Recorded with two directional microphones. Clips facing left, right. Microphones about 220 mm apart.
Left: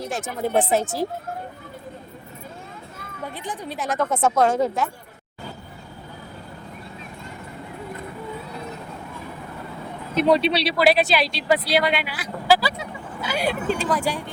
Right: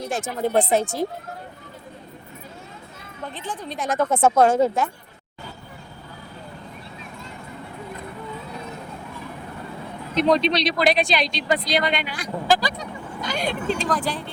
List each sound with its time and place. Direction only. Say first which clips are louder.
0.7 s speech: right 1 dB; centre (ahead or behind)
3.2 s speech: even; 10° left (ahead or behind)
3.9 s speech: right 3 dB; 30° right (ahead or behind)
4.8 s speech: right 1 dB; centre (ahead or behind)
10.2 s speech: left 1 dB; 5° left (ahead or behind)